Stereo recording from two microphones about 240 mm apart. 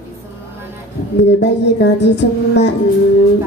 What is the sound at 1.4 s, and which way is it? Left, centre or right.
Music, left.